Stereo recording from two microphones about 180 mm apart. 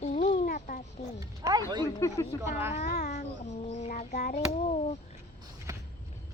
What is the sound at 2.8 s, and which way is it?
Child singing, 40° left (ahead or behind).